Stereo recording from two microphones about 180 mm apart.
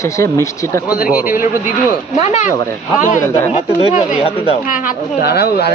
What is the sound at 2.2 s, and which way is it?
Speech, 35° left (ahead or behind).